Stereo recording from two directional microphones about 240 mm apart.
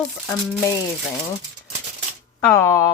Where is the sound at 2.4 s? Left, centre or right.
Centre.